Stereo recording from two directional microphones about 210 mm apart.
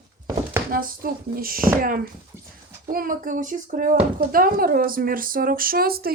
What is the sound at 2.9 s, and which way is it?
A child's voice, 40° right (ahead or behind).